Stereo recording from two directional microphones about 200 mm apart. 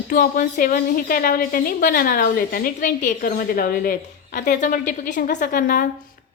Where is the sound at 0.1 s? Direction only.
40° left (ahead or behind).